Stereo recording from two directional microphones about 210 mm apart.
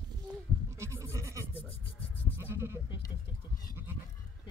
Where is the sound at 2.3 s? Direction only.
10° right (ahead or behind).